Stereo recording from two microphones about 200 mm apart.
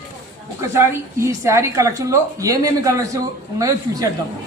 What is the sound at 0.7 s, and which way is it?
A woman's voice, 10° right (ahead or behind).